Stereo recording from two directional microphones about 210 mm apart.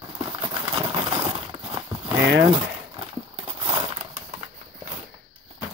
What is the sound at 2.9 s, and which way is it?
Horse, 20° right (ahead or behind).